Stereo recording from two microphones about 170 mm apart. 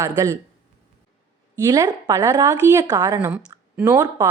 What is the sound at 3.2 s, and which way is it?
Speech, 10° right (ahead or behind).